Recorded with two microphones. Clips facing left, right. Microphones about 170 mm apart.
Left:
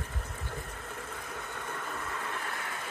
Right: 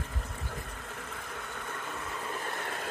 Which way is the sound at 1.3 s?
Centre (ahead or behind).